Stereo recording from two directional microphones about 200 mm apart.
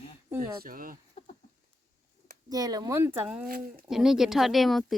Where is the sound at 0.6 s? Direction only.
45° right (ahead or behind).